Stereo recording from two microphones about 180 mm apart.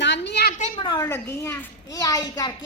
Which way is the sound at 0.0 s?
75° left (ahead or behind).